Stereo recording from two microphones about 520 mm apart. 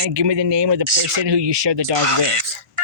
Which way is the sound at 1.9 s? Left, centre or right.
Right.